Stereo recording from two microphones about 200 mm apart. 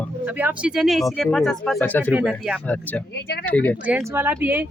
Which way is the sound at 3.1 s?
55° left (ahead or behind).